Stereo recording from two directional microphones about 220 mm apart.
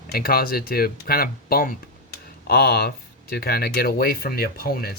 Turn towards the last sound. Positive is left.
turn(degrees=45)  # may be behind; listen again after turning